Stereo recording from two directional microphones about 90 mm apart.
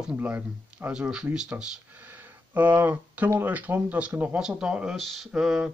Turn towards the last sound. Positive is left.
turn(degrees=-5)  # may be behind; listen again after turning